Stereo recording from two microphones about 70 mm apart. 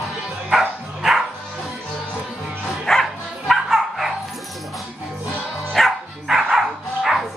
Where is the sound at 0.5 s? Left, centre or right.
Centre.